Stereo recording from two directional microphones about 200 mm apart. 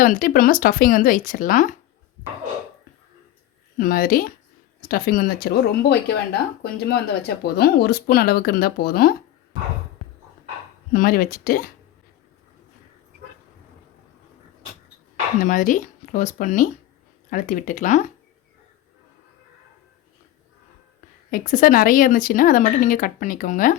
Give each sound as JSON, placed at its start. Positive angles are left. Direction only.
{"t": 0.0, "sound": "speech", "side_deg": 45}
{"t": 3.8, "sound": "speech", "side_deg": 45}
{"t": 10.9, "sound": "speech", "side_deg": 45}
{"t": 15.4, "sound": "speech", "side_deg": 40}
{"t": 21.2, "sound": "speech", "side_deg": 40}